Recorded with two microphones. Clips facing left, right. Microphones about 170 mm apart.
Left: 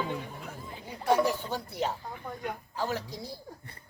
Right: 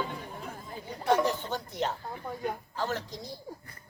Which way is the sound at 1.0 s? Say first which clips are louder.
Left 1 dB; 10° left (ahead or behind).